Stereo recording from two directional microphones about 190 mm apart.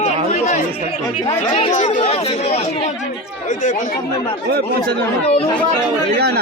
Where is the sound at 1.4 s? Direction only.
40° left (ahead or behind).